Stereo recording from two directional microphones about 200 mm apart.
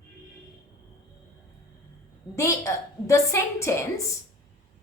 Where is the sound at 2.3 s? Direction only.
15° left (ahead or behind).